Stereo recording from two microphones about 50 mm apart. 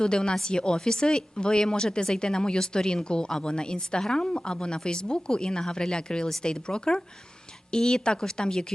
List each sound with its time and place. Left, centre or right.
0.0 s speech: centre